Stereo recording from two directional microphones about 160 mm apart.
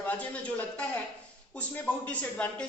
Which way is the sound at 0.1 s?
10° left (ahead or behind).